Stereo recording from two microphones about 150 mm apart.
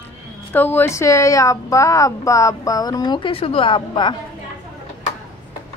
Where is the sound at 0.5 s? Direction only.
15° left (ahead or behind); by 4.2 s 30° left (ahead or behind).